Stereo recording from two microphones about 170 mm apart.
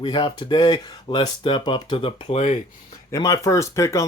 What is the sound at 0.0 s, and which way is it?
Speech, 25° left (ahead or behind).